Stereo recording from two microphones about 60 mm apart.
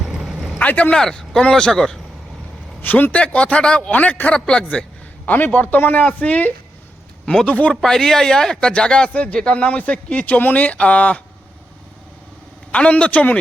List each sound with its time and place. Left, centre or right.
0.0 s vehicle: centre
0.6 s speech: left
0.9 s speech: centre
2.8 s speech: left; by 4.6 s centre
5.2 s speech: left
7.8 s speech: centre
12.7 s speech: left